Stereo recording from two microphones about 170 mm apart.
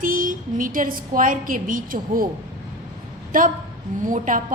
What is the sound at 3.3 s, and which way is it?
A woman's voice, 55° right (ahead or behind).